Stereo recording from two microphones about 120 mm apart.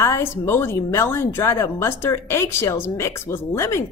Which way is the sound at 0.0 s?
20° left (ahead or behind).